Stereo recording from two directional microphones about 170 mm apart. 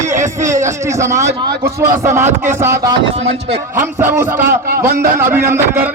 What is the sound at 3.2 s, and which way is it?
Speech, 35° right (ahead or behind).